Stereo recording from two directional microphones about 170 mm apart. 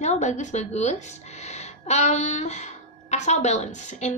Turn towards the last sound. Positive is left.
turn(degrees=45)  # may be behind; listen again after turning